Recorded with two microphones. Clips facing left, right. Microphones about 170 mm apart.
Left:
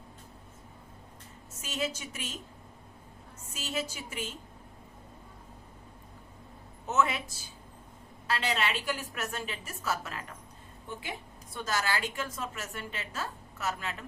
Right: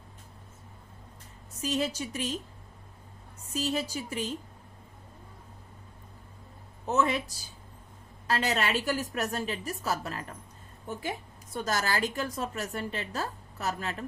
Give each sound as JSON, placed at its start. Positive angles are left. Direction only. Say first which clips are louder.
{"t": 1.6, "sound": "a woman's voice", "louder": "right 5 dB", "side_deg": -35}
{"t": 3.5, "sound": "a woman's voice", "louder": "right 5 dB", "side_deg": -35}
{"t": 6.8, "sound": "a woman's voice", "louder": "right 2 dB", "side_deg": -35}
{"t": 11.5, "sound": "a woman's voice", "louder": "right 2 dB", "side_deg": -40}